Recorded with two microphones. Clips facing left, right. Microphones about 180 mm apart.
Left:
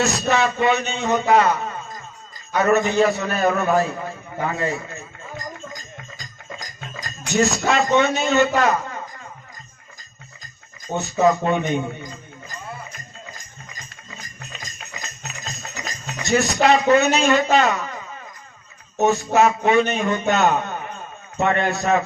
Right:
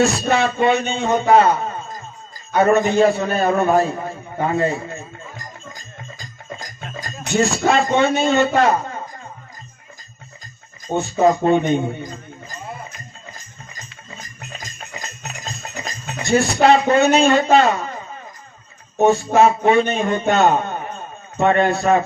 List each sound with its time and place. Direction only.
0.0 s a man's voice: 30° right (ahead or behind)
6.9 s music: 30° right (ahead or behind)
7.9 s a man's voice: 30° right (ahead or behind)
11.0 s speech: 30° right (ahead or behind)
14.9 s a sound: 30° right (ahead or behind)
16.6 s a man's voice: 30° right (ahead or behind)
19.0 s a man's voice: 30° right (ahead or behind)